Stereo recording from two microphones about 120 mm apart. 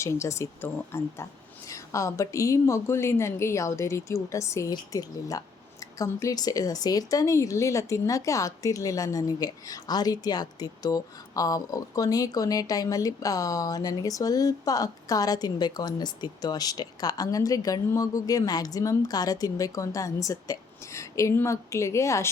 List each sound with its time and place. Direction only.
0.0 s speech: 25° left (ahead or behind)